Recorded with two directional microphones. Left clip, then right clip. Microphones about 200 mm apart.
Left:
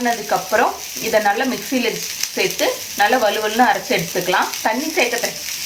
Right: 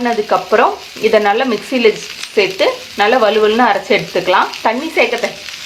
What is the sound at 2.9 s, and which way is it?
Speech, 30° right (ahead or behind).